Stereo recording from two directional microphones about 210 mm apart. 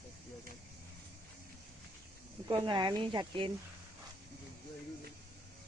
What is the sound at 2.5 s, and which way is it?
A woman's voice, 20° right (ahead or behind).